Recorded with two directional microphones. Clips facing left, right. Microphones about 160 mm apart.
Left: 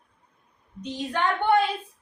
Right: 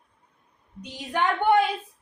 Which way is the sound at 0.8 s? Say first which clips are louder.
Even; 15° right (ahead or behind).